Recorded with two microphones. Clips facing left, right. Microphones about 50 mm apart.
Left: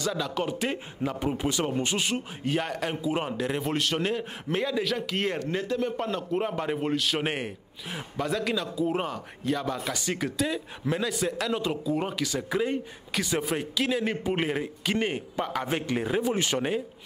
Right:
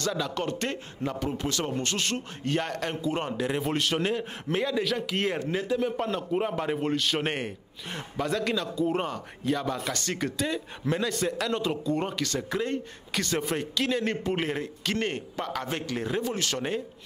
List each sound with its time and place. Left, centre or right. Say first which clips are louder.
0.0 s a man's voice: even; centre